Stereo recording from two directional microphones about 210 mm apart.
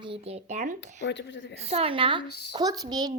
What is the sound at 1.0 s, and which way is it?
Speech, 60° left (ahead or behind).